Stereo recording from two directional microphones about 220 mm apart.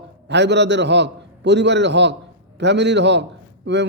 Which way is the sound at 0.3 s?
50° right (ahead or behind).